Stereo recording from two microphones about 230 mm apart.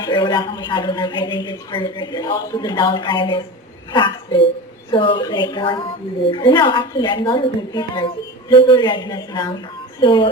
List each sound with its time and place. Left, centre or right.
0.0 s a woman's voice: centre